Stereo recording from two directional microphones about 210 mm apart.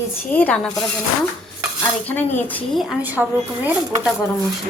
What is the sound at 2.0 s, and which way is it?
Speech, 10° left (ahead or behind).